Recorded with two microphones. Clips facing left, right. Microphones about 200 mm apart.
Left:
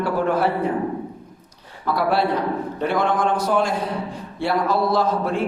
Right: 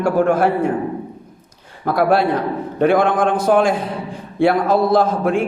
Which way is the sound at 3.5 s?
65° right (ahead or behind).